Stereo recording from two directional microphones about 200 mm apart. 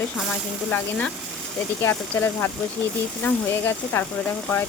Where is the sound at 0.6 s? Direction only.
5° left (ahead or behind).